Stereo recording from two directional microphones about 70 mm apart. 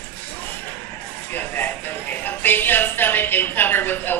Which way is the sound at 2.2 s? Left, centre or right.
Left.